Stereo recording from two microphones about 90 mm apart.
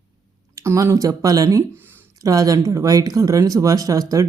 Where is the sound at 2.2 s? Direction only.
40° right (ahead or behind).